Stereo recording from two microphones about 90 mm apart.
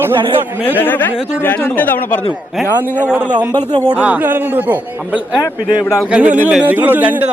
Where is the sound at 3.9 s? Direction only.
15° right (ahead or behind).